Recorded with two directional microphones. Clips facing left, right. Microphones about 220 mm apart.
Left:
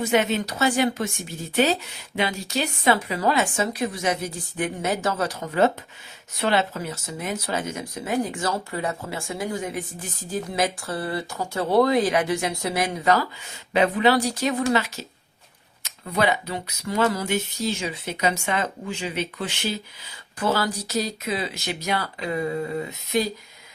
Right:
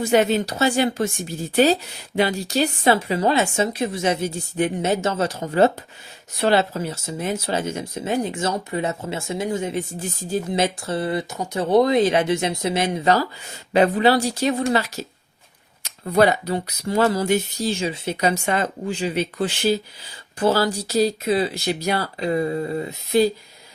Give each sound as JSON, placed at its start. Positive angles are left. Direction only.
{"t": 0.1, "sound": "speech", "side_deg": -35}